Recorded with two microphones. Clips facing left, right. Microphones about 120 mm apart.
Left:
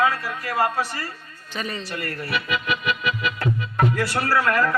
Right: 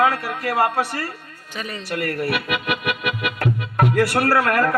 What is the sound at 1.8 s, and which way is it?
Speech, 65° right (ahead or behind).